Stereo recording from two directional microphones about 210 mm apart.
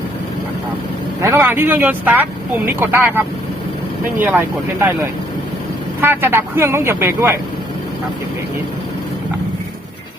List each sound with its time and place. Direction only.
1.2 s speech: 10° right (ahead or behind)
6.0 s speech: 10° right (ahead or behind)